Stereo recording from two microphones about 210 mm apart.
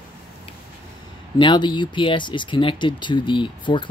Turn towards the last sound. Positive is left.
turn(degrees=25)  # may be behind; listen again after turning